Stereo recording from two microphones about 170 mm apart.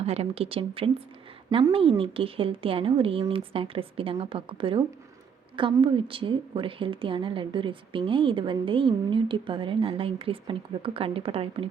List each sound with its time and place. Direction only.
0.0 s a woman's voice: 35° right (ahead or behind)